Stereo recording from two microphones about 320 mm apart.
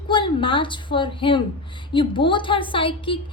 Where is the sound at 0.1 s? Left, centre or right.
Centre.